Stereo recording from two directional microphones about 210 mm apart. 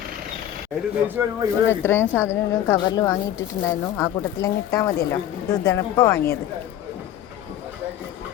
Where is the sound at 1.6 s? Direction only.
10° left (ahead or behind).